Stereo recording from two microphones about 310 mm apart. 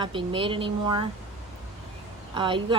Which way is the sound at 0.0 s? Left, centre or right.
Centre.